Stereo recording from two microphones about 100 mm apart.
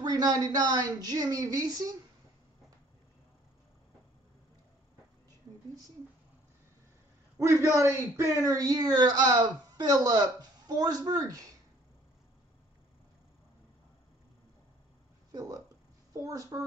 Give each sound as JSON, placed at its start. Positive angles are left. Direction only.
{"t": 0.0, "sound": "a woman's voice", "side_deg": -40}
{"t": 7.3, "sound": "a man's voice", "side_deg": -30}
{"t": 15.3, "sound": "a woman's voice", "side_deg": -35}